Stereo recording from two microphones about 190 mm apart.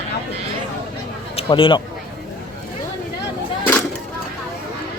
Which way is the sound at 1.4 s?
30° left (ahead or behind).